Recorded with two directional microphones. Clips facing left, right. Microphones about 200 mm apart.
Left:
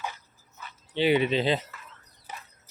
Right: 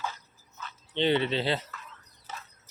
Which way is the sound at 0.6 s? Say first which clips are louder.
Left 2 dB; 10° left (ahead or behind).